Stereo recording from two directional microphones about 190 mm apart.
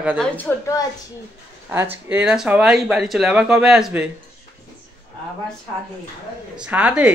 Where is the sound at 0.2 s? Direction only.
10° left (ahead or behind).